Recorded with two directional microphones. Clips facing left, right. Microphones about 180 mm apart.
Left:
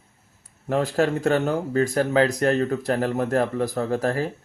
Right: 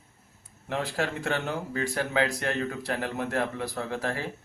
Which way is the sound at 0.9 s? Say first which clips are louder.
Left 10 dB; 45° left (ahead or behind).